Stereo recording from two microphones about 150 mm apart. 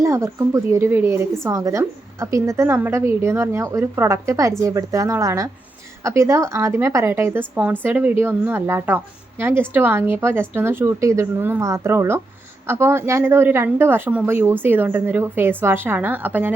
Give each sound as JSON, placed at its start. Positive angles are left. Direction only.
{"t": 0.0, "sound": "a woman's voice", "side_deg": -20}